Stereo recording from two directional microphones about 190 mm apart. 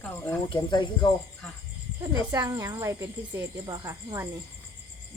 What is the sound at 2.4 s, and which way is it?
Speech, 20° right (ahead or behind).